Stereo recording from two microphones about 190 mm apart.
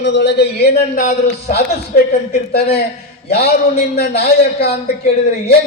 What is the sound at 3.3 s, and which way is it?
A man's voice, 55° left (ahead or behind).